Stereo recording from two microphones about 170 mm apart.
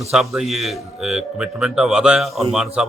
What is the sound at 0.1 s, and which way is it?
A man's voice, 5° right (ahead or behind).